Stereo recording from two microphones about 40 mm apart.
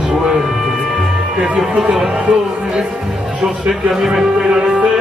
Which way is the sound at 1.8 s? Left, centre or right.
Right.